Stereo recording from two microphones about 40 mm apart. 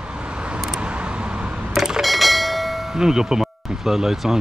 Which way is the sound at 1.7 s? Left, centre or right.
Centre.